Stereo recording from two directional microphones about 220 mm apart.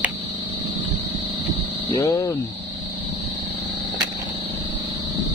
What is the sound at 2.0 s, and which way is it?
Speech, 20° left (ahead or behind).